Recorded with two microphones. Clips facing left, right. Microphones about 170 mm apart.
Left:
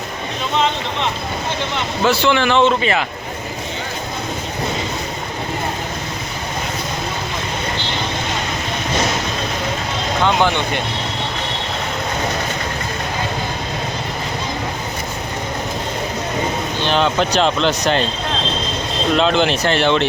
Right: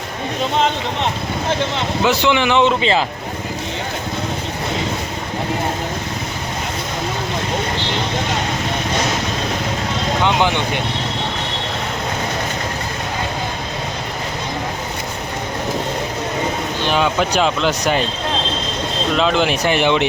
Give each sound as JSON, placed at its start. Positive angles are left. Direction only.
{"t": 2.0, "sound": "speech", "side_deg": -15}
{"t": 10.2, "sound": "speech", "side_deg": -15}
{"t": 16.8, "sound": "speech", "side_deg": -5}
{"t": 19.1, "sound": "speech", "side_deg": 0}